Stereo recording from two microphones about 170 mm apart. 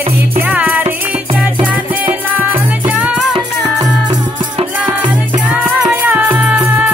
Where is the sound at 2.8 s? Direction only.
5° right (ahead or behind).